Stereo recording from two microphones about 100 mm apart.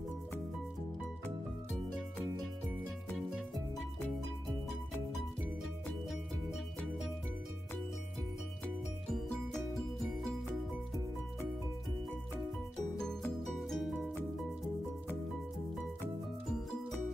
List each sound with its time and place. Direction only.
12.9 s music: 5° left (ahead or behind)